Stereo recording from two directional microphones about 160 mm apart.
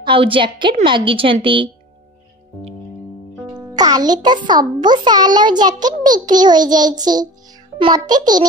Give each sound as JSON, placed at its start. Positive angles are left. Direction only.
{"t": 0.0, "sound": "a woman's voice", "side_deg": -35}
{"t": 3.7, "sound": "a child's voice", "side_deg": -25}